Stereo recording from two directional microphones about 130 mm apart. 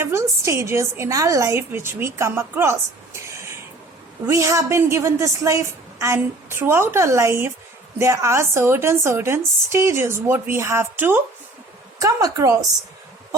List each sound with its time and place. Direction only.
0.0 s a woman's voice: 20° right (ahead or behind)